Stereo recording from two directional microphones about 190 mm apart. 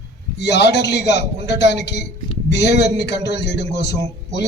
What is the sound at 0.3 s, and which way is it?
A man's voice, 65° left (ahead or behind).